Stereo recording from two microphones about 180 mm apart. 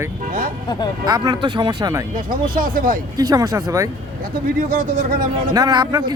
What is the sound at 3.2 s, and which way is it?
Speech, 20° right (ahead or behind).